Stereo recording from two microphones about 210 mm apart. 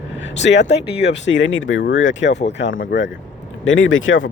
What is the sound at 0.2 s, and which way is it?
Speech, 55° left (ahead or behind).